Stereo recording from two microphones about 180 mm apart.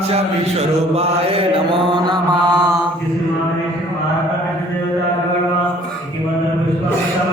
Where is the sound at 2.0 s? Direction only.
25° right (ahead or behind).